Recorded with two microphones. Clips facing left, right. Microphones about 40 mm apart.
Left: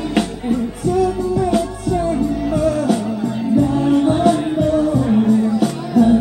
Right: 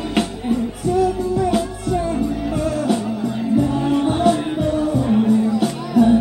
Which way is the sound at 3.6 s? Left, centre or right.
Centre.